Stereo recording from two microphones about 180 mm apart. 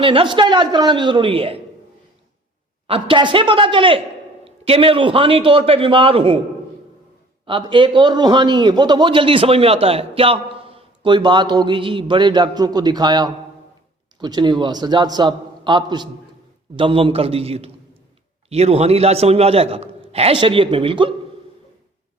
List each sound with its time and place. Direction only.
0.0 s a man's voice: 30° right (ahead or behind)
2.8 s a man's voice: 30° right (ahead or behind)
7.4 s a man's voice: 30° right (ahead or behind)